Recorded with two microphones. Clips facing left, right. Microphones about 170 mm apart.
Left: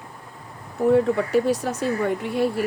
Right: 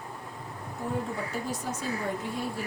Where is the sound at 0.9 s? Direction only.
75° left (ahead or behind).